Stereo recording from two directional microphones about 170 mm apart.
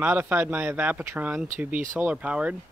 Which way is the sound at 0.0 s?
10° right (ahead or behind).